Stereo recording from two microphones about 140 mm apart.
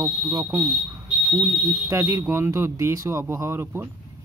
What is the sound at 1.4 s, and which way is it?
Speech, 20° right (ahead or behind).